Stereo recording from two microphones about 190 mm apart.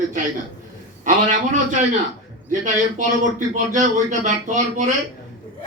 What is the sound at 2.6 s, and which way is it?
A man's voice, 40° right (ahead or behind).